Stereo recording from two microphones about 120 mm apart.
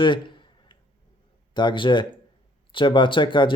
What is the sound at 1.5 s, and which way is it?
Speech, 40° left (ahead or behind).